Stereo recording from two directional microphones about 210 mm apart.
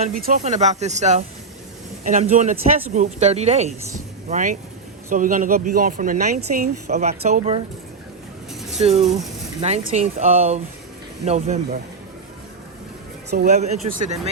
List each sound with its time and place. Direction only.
0.3 s speech: 35° right (ahead or behind)
8.8 s speech: 30° right (ahead or behind)
13.3 s speech: 35° right (ahead or behind)